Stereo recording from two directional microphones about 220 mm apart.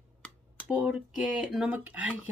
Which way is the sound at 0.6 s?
5° right (ahead or behind).